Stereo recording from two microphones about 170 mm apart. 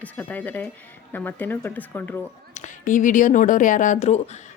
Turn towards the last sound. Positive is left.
turn(degrees=40)  # may be behind; listen again after turning